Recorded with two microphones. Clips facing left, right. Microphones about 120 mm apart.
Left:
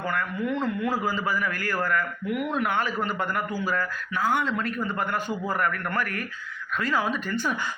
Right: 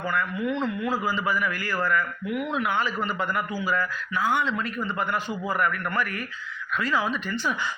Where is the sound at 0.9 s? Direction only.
50° left (ahead or behind).